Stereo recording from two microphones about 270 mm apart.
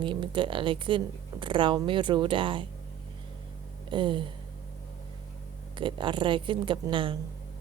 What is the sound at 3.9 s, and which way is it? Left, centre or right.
Speech, centre.